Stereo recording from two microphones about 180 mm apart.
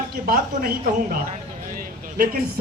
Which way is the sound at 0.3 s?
55° right (ahead or behind).